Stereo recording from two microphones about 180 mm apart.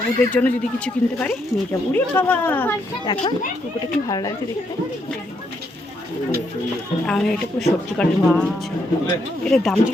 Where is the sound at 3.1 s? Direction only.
20° left (ahead or behind).